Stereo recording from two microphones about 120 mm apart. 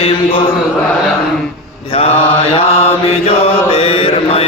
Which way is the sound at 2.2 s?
50° left (ahead or behind).